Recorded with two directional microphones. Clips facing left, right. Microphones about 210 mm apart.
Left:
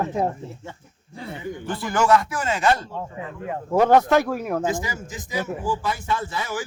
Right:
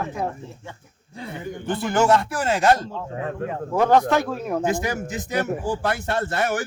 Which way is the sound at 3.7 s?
10° left (ahead or behind).